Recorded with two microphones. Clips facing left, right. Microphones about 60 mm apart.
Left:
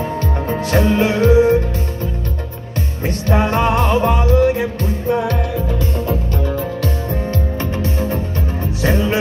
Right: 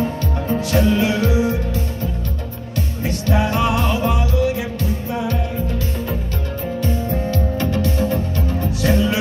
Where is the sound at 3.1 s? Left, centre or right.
Left.